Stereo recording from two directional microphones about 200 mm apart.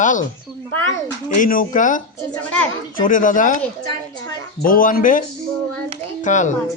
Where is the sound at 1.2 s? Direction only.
40° left (ahead or behind).